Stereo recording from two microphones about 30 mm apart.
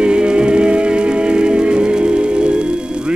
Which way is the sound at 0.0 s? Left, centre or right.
Right.